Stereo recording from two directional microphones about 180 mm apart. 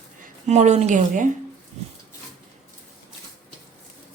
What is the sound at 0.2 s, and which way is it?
A woman's voice, 40° right (ahead or behind).